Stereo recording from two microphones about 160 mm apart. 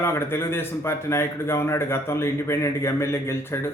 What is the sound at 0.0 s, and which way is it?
Speech, 15° left (ahead or behind).